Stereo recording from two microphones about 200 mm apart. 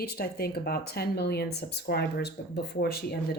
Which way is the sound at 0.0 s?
50° left (ahead or behind).